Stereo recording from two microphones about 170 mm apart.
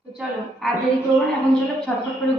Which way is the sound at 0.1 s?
5° right (ahead or behind).